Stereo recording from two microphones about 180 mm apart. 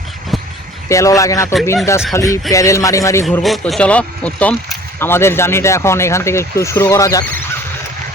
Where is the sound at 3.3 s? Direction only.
Centre (ahead or behind); by 7.4 s 15° left (ahead or behind).